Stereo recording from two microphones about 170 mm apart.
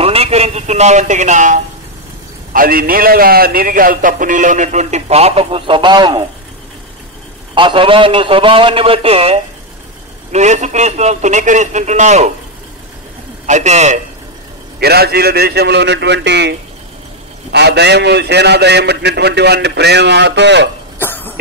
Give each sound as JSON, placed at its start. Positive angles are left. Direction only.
{"t": 0.0, "sound": "speech", "side_deg": -35}
{"t": 2.5, "sound": "a man's voice", "side_deg": -55}
{"t": 7.5, "sound": "a man's voice", "side_deg": -30}
{"t": 13.5, "sound": "a man's voice", "side_deg": -40}
{"t": 14.8, "sound": "a man's voice", "side_deg": -70}
{"t": 17.5, "sound": "a man's voice", "side_deg": -80}
{"t": 21.0, "sound": "cough", "side_deg": 10}